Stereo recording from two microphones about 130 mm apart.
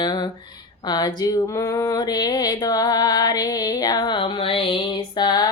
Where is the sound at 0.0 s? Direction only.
35° left (ahead or behind).